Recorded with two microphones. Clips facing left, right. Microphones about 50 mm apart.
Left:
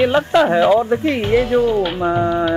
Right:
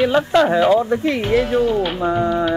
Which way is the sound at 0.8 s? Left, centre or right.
Centre.